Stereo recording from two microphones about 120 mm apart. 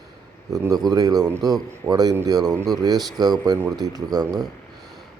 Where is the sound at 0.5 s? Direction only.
30° right (ahead or behind).